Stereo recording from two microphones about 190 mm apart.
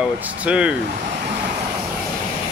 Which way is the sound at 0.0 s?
5° right (ahead or behind).